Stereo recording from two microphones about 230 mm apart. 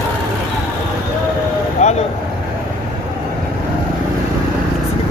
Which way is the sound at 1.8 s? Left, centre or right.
Left.